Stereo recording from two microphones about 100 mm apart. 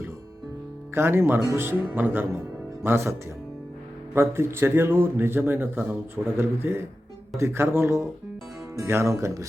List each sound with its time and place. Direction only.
0.9 s speech: 25° right (ahead or behind)